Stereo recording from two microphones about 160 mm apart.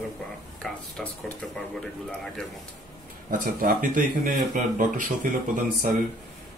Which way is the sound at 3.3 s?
55° right (ahead or behind).